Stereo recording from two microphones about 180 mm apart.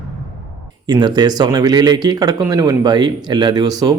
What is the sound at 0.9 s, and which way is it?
Speech, 25° right (ahead or behind).